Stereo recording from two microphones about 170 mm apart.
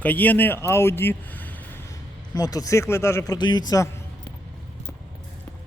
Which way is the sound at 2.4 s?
20° left (ahead or behind).